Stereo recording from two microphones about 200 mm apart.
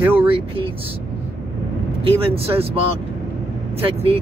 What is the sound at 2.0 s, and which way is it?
Speech, 30° right (ahead or behind).